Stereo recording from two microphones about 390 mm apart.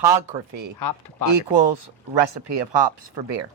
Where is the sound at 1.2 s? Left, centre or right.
Right.